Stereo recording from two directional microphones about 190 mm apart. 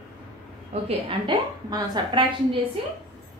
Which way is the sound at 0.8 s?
25° right (ahead or behind).